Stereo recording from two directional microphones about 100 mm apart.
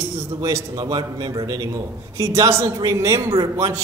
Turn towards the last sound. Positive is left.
turn(degrees=-35)  # may be behind; listen again after turning